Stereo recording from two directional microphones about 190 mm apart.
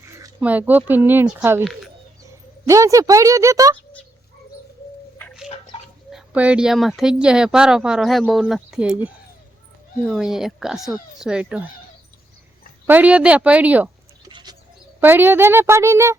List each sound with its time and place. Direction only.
0.0 s speech: 10° right (ahead or behind)
2.6 s speech: 15° right (ahead or behind)
6.1 s speech: 5° right (ahead or behind)
12.9 s speech: 10° right (ahead or behind)
14.3 s goat: 25° right (ahead or behind)
15.0 s speech: 10° right (ahead or behind)